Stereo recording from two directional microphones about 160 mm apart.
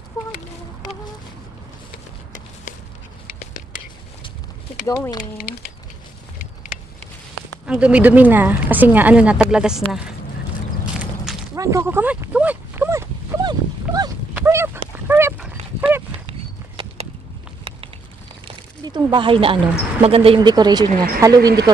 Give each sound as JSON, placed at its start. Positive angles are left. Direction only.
{"t": 4.8, "sound": "speech", "side_deg": 20}
{"t": 5.4, "sound": "speech", "side_deg": 75}
{"t": 7.6, "sound": "speech", "side_deg": -5}
{"t": 11.0, "sound": "a sound", "side_deg": -5}
{"t": 11.5, "sound": "dog", "side_deg": -20}
{"t": 14.3, "sound": "a sound", "side_deg": -15}
{"t": 15.0, "sound": "dog", "side_deg": -15}
{"t": 16.3, "sound": "horse", "side_deg": -40}
{"t": 17.7, "sound": "a sound", "side_deg": -35}
{"t": 18.9, "sound": "speech", "side_deg": -30}